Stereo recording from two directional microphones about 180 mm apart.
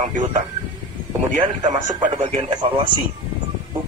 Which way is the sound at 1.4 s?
25° right (ahead or behind).